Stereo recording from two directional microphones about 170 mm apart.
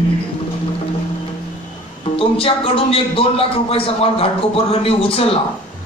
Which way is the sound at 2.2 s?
35° left (ahead or behind).